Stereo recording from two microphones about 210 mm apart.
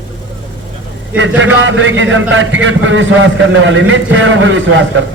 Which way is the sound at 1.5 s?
65° right (ahead or behind).